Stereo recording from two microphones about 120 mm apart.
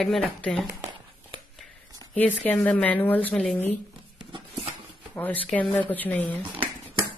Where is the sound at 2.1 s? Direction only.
15° left (ahead or behind).